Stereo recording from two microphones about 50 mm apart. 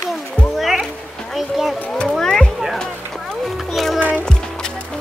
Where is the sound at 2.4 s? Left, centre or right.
Centre.